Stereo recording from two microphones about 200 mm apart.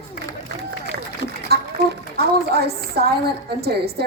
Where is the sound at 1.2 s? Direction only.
60° right (ahead or behind).